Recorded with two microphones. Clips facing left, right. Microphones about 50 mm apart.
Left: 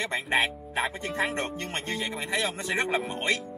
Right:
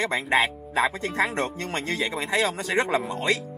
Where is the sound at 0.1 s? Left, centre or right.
Right.